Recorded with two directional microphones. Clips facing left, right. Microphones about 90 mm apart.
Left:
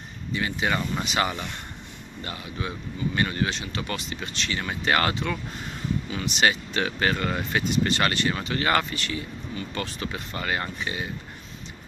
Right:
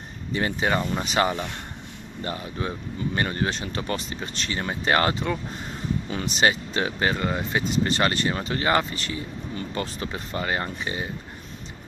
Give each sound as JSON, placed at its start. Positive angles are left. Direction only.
{"t": 0.3, "sound": "speech", "side_deg": -35}